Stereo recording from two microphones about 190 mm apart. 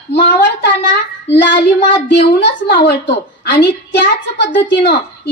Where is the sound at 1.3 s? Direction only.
70° left (ahead or behind).